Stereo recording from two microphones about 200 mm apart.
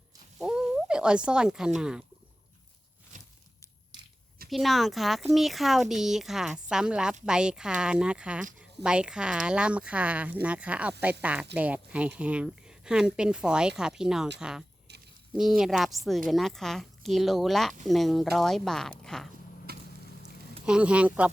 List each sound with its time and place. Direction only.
0.3 s speech: 5° right (ahead or behind)
4.4 s a woman's voice: centre (ahead or behind)
19.7 s a sound: 50° right (ahead or behind)
20.7 s a woman's voice: 5° right (ahead or behind)